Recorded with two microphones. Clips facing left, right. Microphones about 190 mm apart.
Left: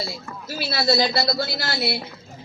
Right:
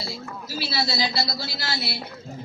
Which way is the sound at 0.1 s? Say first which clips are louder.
Even; 55° left (ahead or behind).